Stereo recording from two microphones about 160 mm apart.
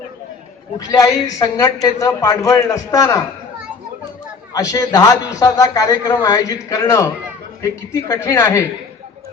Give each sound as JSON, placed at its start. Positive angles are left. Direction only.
{"t": 0.8, "sound": "a man's voice", "side_deg": 20}
{"t": 4.5, "sound": "a man's voice", "side_deg": 20}